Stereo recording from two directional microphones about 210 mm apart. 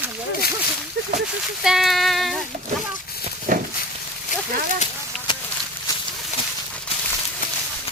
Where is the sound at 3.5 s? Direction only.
35° right (ahead or behind).